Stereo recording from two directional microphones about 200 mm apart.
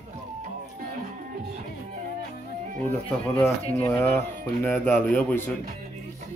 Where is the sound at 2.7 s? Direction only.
40° right (ahead or behind).